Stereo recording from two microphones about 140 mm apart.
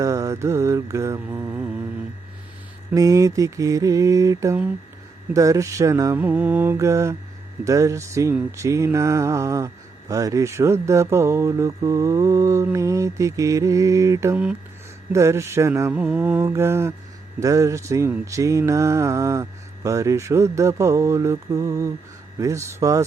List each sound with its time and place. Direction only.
0.0 s mantra: 20° right (ahead or behind)
2.9 s mantra: 25° right (ahead or behind)